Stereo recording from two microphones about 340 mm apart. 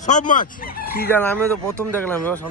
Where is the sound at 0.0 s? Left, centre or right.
Left.